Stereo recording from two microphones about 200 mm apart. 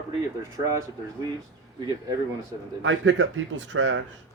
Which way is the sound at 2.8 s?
70° right (ahead or behind).